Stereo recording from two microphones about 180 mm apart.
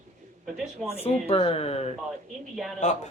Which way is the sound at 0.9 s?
35° left (ahead or behind).